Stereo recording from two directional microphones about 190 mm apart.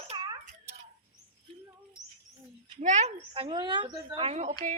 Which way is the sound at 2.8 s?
35° right (ahead or behind).